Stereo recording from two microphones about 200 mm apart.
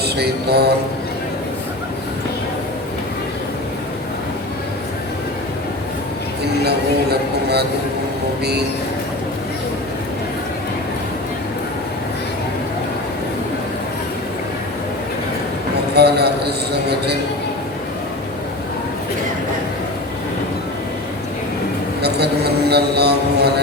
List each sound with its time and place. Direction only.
0.0 s mantra: 55° right (ahead or behind)
6.7 s speech: 55° right (ahead or behind)
16.0 s speech: 55° right (ahead or behind)
22.0 s a sound: 55° right (ahead or behind)